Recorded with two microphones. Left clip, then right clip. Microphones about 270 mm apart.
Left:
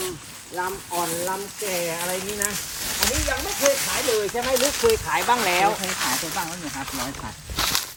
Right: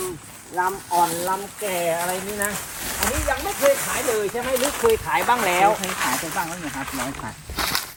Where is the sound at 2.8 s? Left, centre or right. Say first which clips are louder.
Even; centre.